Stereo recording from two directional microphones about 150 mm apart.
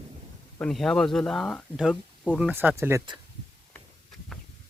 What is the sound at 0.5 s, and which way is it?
Speech, 5° left (ahead or behind).